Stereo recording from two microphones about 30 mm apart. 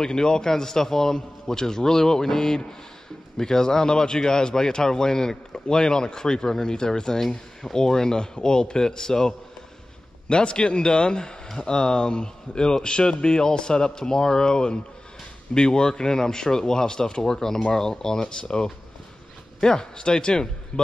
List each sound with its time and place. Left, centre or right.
0.0 s a man's voice: left
7.2 s a man's voice: centre
7.7 s speech: centre
10.2 s a man's voice: left